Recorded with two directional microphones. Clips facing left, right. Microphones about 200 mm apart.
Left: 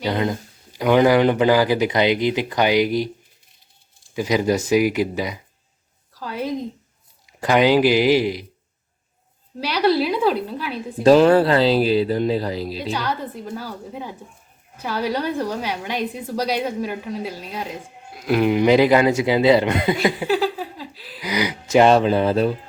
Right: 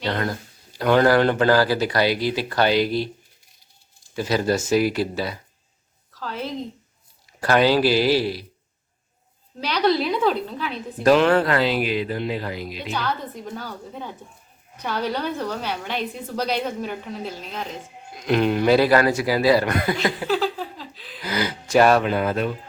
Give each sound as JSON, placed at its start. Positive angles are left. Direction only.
{"t": 0.0, "sound": "a woman's voice", "side_deg": 15}
{"t": 4.1, "sound": "a woman's voice", "side_deg": 15}
{"t": 9.6, "sound": "a woman's voice", "side_deg": 10}
{"t": 11.0, "sound": "speech", "side_deg": 30}
{"t": 12.9, "sound": "a woman's voice", "side_deg": 10}